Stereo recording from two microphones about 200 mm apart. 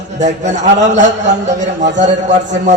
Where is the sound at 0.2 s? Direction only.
35° right (ahead or behind).